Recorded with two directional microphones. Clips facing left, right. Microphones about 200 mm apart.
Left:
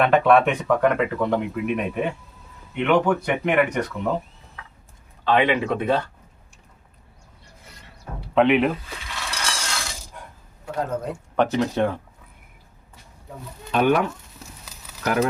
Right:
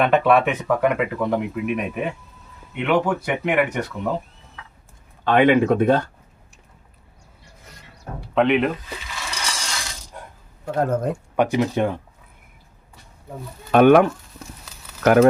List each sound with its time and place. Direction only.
0.0 s speech: centre (ahead or behind)
5.2 s speech: 50° right (ahead or behind)
8.4 s cutlery: centre (ahead or behind)
10.8 s speech: 50° right (ahead or behind)
11.3 s speech: 15° right (ahead or behind)
13.7 s speech: 55° right (ahead or behind)